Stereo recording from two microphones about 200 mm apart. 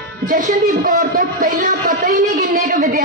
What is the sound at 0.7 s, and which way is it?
A woman's voice, 40° right (ahead or behind).